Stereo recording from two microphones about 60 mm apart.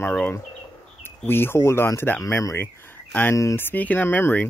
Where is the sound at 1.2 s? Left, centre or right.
Left.